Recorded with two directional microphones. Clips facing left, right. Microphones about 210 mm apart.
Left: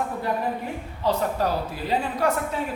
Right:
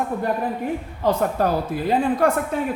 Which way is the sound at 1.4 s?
55° right (ahead or behind).